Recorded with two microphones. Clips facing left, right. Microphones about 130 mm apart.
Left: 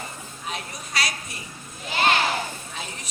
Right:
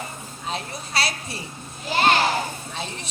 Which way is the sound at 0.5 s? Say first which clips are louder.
Right 4 dB; 30° right (ahead or behind).